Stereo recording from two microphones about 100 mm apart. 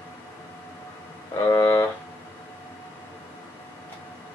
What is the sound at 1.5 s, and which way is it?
Music, 35° left (ahead or behind).